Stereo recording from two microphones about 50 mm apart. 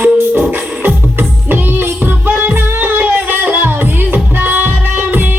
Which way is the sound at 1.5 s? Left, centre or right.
Right.